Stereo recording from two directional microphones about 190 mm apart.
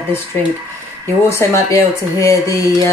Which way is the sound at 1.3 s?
15° left (ahead or behind).